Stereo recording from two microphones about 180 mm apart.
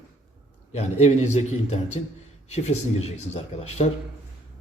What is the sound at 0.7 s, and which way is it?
A man's voice, 35° left (ahead or behind).